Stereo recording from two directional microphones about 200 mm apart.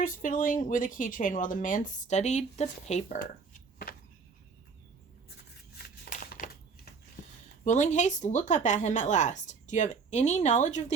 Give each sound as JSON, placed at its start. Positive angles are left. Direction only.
{"t": 0.0, "sound": "speech", "side_deg": 40}
{"t": 5.7, "sound": "a sound", "side_deg": 45}
{"t": 7.6, "sound": "speech", "side_deg": 35}